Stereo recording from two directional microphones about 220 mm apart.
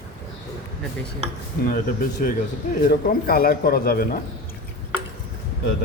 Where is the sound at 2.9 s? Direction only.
45° left (ahead or behind).